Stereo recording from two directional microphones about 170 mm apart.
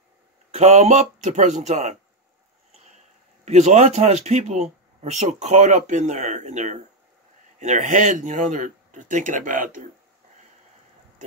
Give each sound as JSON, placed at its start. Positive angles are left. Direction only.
{"t": 0.5, "sound": "speech", "side_deg": -40}
{"t": 3.4, "sound": "speech", "side_deg": -40}